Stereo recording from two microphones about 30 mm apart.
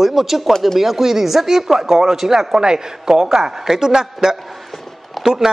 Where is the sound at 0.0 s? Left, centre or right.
Centre.